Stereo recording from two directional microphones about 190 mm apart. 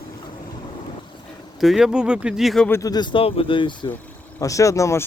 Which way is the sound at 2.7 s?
20° left (ahead or behind).